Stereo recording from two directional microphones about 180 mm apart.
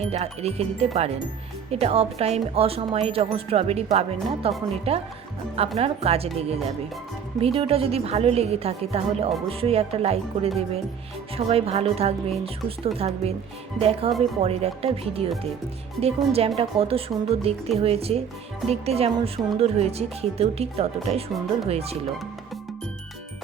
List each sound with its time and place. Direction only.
0.0 s speech: 35° right (ahead or behind)